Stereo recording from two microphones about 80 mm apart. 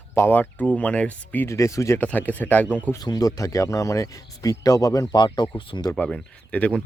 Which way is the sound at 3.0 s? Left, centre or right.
Left.